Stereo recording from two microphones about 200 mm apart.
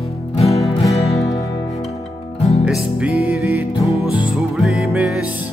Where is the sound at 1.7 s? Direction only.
30° left (ahead or behind).